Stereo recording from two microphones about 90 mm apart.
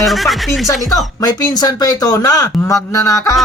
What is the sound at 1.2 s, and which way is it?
Speech, 50° left (ahead or behind).